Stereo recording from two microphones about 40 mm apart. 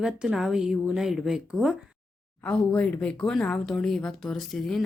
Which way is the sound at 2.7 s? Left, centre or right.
Left.